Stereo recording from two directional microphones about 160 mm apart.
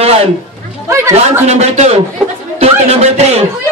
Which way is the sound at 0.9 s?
20° right (ahead or behind).